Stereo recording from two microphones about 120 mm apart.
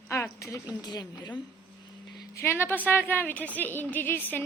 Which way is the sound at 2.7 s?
15° left (ahead or behind).